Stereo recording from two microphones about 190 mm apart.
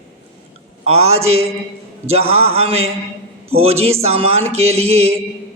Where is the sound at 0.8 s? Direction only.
35° right (ahead or behind).